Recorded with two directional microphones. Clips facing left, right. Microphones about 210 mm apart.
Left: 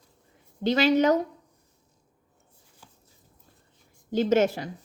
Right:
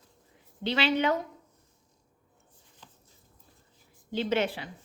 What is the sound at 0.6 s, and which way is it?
Speech, 45° left (ahead or behind).